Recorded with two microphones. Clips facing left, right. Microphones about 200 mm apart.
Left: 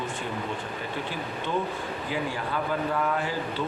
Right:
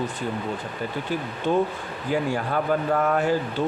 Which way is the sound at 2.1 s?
50° right (ahead or behind).